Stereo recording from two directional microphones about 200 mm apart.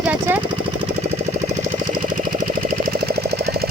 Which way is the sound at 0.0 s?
5° right (ahead or behind).